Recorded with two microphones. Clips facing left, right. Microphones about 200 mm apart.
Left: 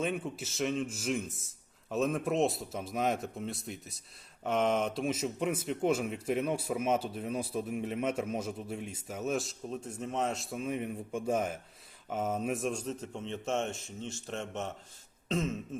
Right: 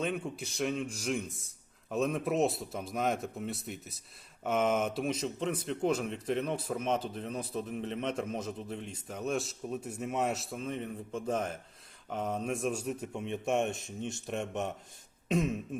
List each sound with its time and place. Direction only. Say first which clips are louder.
0.0 s a man's voice: even; 5° left (ahead or behind); by 15.5 s 15° right (ahead or behind)